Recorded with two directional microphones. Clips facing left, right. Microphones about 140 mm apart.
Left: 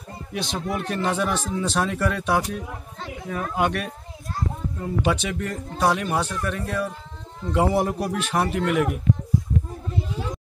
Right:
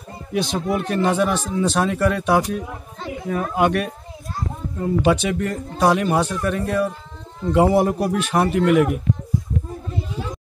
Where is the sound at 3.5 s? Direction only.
55° right (ahead or behind).